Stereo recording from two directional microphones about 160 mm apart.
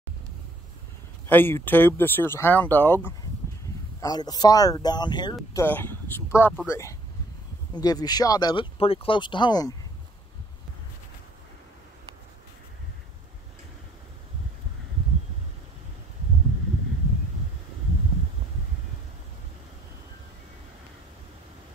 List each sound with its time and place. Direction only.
1.2 s speech: 15° left (ahead or behind)
4.0 s speech: 25° left (ahead or behind)
5.5 s speech: 15° left (ahead or behind)